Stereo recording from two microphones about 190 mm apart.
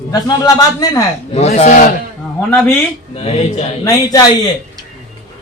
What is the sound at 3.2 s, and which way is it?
Speech, 30° left (ahead or behind).